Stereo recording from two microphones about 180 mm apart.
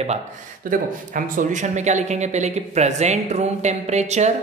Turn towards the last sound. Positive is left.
turn(degrees=-40)  # may be behind; listen again after turning